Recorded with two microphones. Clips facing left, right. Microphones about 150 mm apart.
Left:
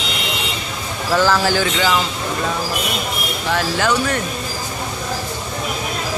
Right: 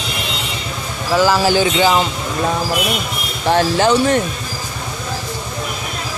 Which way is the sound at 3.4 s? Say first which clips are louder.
Right 6 dB; 30° right (ahead or behind).